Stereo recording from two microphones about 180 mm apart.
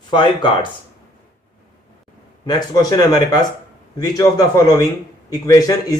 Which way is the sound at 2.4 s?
20° left (ahead or behind).